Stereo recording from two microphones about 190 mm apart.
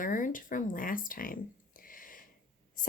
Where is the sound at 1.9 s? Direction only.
45° left (ahead or behind).